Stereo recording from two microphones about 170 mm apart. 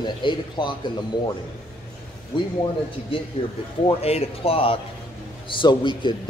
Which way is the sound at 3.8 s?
35° left (ahead or behind).